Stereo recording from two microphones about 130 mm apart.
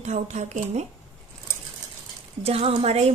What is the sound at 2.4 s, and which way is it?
Speech, 50° right (ahead or behind).